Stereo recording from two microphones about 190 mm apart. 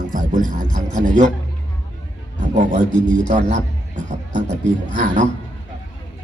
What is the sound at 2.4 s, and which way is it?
A man's voice, 40° right (ahead or behind).